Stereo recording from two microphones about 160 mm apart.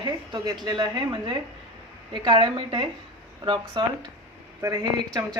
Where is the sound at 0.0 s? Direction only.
25° right (ahead or behind).